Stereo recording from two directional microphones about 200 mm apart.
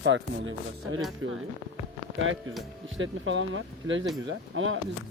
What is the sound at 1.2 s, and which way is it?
Speech, 85° right.